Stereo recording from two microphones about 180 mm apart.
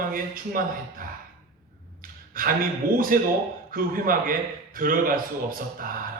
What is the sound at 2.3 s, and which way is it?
A man's voice, 50° right (ahead or behind).